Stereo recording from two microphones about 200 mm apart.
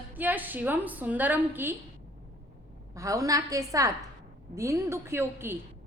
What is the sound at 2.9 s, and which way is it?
A woman's voice, 15° right (ahead or behind).